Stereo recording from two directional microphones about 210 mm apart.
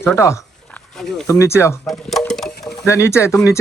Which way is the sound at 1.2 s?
15° left (ahead or behind).